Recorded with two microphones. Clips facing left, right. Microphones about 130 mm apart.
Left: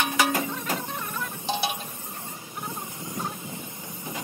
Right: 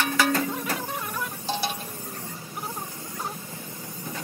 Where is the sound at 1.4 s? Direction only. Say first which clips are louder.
Left 2 dB; 15° left (ahead or behind).